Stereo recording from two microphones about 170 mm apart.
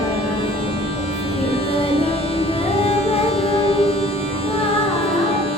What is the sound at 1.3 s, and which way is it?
Music, 35° left (ahead or behind).